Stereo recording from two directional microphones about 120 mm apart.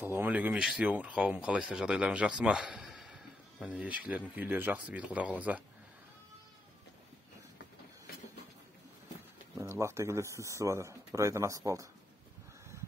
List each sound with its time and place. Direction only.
0.0 s speech: 20° right (ahead or behind)
9.6 s speech: 25° right (ahead or behind)